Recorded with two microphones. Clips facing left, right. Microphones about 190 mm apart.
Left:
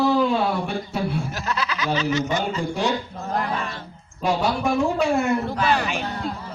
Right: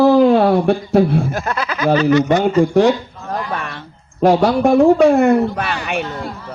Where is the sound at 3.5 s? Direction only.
60° right (ahead or behind).